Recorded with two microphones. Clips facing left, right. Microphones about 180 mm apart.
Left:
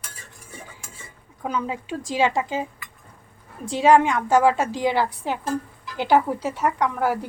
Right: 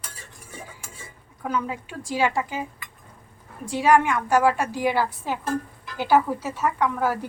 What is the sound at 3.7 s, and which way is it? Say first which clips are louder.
A woman's voice: left 2 dB; 20° left (ahead or behind).